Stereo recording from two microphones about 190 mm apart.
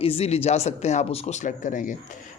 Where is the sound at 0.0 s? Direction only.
30° left (ahead or behind).